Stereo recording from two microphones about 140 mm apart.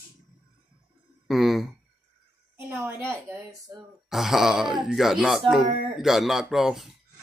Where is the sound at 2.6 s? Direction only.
15° right (ahead or behind).